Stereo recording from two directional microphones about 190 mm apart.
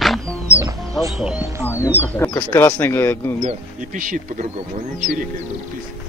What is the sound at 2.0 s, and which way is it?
Speech, 10° left (ahead or behind).